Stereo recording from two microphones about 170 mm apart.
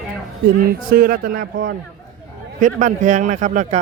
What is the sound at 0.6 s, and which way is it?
Speech, 60° right (ahead or behind).